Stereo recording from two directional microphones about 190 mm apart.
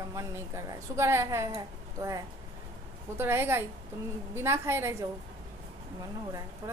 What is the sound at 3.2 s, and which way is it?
A woman's voice, 15° right (ahead or behind).